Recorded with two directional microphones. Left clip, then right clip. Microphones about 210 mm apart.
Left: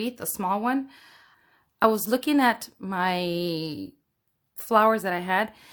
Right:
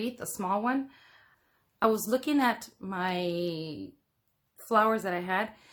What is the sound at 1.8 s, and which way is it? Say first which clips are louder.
Speech: left 4 dB; 35° left (ahead or behind).